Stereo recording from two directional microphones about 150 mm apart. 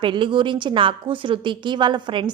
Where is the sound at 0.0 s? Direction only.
35° right (ahead or behind).